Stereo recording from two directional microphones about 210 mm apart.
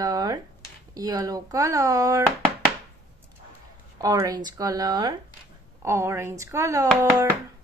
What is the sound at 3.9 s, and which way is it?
Speech, 15° right (ahead or behind).